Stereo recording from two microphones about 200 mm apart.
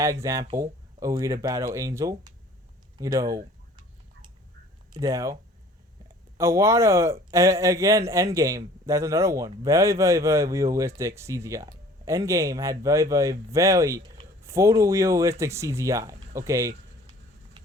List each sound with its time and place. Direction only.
0.0 s a man's voice: 15° right (ahead or behind)
3.0 s a sound: 15° right (ahead or behind)
4.9 s a man's voice: 15° right (ahead or behind)